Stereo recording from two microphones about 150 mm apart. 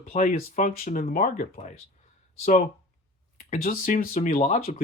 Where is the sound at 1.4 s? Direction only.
50° left (ahead or behind).